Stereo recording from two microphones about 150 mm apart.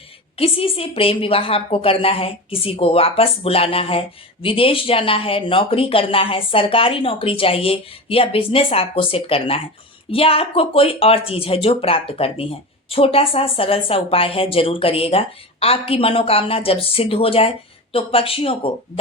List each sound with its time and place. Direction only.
0.3 s speech: 40° left (ahead or behind)